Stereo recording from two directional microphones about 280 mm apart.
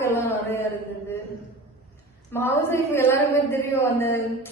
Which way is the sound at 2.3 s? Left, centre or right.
Centre.